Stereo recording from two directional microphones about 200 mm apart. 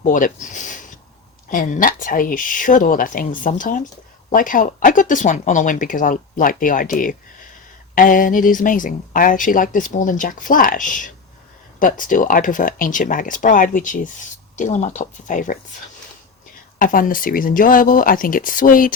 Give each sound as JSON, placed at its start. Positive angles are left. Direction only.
{"t": 0.0, "sound": "a sound", "side_deg": 40}
{"t": 1.5, "sound": "speech", "side_deg": 40}
{"t": 16.7, "sound": "speech", "side_deg": 45}